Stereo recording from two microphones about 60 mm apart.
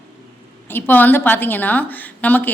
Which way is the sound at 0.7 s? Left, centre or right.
Left.